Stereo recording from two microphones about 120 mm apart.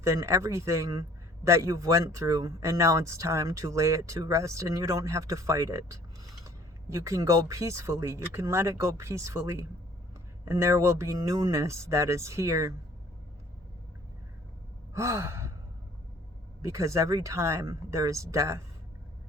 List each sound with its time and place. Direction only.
0.0 s speech: 25° right (ahead or behind)
14.9 s sigh: 25° right (ahead or behind)
16.6 s speech: 25° right (ahead or behind)